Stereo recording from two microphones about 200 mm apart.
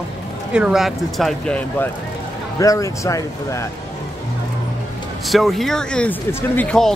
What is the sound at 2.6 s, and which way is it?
Speech, 15° left (ahead or behind).